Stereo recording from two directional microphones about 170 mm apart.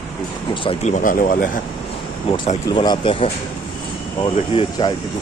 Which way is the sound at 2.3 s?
35° left (ahead or behind).